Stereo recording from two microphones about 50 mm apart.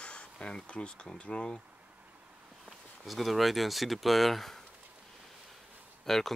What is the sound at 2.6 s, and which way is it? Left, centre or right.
Speech, centre.